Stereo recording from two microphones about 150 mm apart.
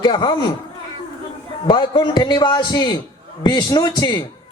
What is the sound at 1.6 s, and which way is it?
Speech, 30° left (ahead or behind).